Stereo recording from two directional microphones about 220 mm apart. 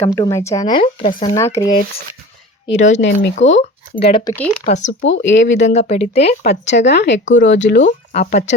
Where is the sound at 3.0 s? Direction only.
50° left (ahead or behind).